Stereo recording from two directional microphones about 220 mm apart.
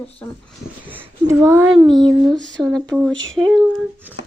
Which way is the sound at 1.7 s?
20° right (ahead or behind).